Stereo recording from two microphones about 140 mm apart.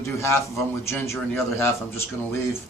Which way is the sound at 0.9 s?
20° left (ahead or behind).